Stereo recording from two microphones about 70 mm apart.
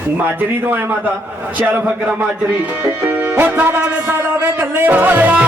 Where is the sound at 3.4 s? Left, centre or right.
Right.